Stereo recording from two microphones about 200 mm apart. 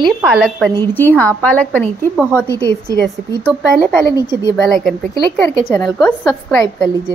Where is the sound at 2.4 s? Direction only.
15° right (ahead or behind).